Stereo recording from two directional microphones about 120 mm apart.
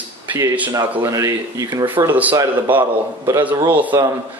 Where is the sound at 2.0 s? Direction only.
15° right (ahead or behind).